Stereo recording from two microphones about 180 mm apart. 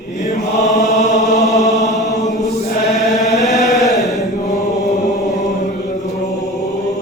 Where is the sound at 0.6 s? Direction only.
40° left (ahead or behind).